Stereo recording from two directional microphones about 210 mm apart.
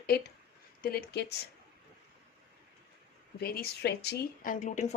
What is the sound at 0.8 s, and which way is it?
Speech, 50° left (ahead or behind).